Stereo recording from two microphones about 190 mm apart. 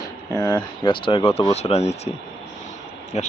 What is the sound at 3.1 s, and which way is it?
Speech, 35° left (ahead or behind).